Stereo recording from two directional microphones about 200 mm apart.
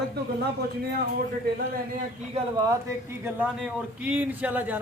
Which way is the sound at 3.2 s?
5° right (ahead or behind).